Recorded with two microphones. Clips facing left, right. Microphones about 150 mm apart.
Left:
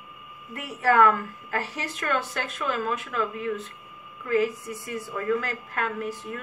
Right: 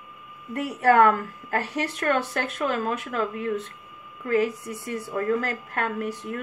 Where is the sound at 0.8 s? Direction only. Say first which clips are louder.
Right 2 dB; 40° right (ahead or behind).